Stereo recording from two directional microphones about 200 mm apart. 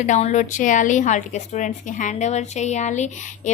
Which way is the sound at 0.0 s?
35° left (ahead or behind).